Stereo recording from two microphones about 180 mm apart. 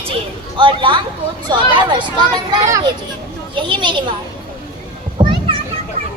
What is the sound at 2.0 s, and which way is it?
A woman's voice, 25° right (ahead or behind).